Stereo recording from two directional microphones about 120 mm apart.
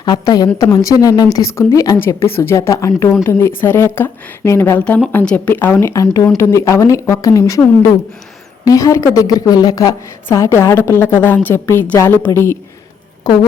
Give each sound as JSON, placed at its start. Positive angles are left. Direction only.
{"t": 0.0, "sound": "a woman's voice", "side_deg": 35}
{"t": 8.6, "sound": "speech", "side_deg": 30}
{"t": 13.2, "sound": "a woman's voice", "side_deg": 35}